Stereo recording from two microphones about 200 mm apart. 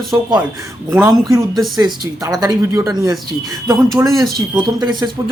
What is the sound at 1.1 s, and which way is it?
Speech, 15° right (ahead or behind).